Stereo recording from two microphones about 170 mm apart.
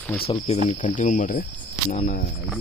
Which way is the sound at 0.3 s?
40° left (ahead or behind).